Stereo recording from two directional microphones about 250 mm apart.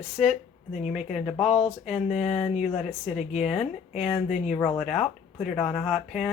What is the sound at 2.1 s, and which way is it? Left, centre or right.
Speech, left.